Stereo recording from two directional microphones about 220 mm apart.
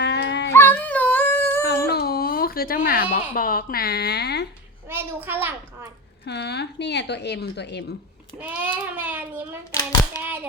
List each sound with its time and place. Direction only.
0.0 s a sound: 50° left (ahead or behind)
0.5 s a sound: 10° left (ahead or behind)
1.9 s baby cry: 45° left (ahead or behind)
3.3 s a woman's voice: 40° left (ahead or behind)
4.9 s a child's voice: 10° right (ahead or behind)
6.2 s a woman's voice: 50° left (ahead or behind)
8.4 s a child's voice: 10° right (ahead or behind)
10.0 s hands: 10° right (ahead or behind)